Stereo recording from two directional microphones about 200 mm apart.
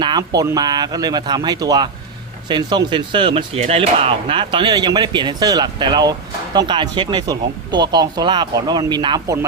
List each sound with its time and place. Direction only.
0.0 s speech: 20° right (ahead or behind)